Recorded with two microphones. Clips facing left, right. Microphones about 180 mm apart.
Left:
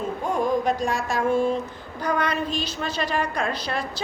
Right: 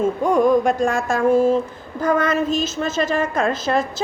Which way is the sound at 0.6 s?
50° right (ahead or behind).